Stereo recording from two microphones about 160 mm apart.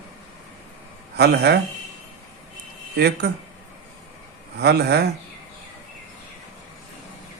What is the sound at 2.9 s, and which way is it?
Speech, 90° right.